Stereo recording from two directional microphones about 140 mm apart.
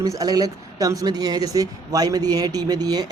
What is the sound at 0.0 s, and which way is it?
Speech, 25° right (ahead or behind).